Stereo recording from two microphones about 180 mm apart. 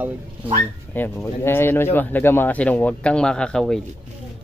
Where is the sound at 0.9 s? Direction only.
15° left (ahead or behind).